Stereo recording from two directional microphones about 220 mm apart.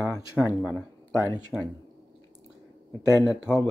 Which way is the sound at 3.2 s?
5° right (ahead or behind).